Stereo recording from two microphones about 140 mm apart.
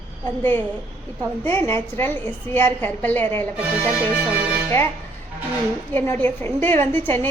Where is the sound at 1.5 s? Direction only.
15° left (ahead or behind).